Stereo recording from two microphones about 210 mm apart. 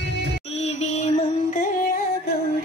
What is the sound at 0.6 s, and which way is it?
Music, 30° left (ahead or behind).